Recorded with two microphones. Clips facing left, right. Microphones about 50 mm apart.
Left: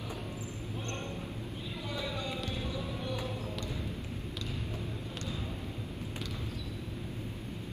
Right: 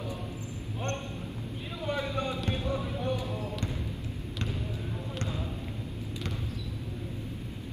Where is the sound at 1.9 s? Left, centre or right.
Right.